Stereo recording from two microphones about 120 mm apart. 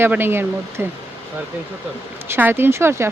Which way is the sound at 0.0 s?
20° right (ahead or behind).